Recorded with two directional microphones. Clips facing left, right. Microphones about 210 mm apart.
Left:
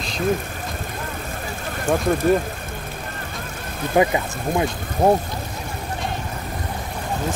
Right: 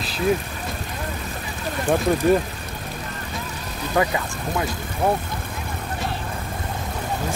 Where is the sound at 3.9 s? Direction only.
20° left (ahead or behind).